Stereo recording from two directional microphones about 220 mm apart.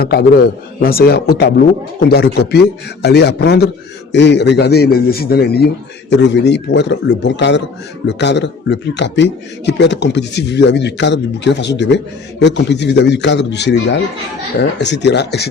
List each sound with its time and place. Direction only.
0.0 s a man's voice: 45° left (ahead or behind)